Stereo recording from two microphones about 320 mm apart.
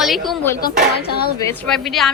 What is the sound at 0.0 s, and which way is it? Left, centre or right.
A woman's voice, centre.